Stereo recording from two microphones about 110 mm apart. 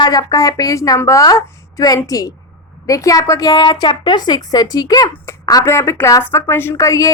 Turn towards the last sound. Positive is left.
turn(degrees=30)  # may be behind; listen again after turning